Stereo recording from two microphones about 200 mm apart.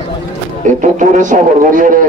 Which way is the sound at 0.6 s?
40° right (ahead or behind).